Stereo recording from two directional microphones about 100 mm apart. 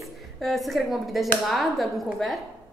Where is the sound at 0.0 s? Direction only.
Centre (ahead or behind).